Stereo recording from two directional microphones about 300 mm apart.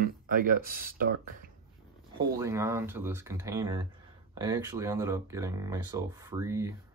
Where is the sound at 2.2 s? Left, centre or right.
Centre.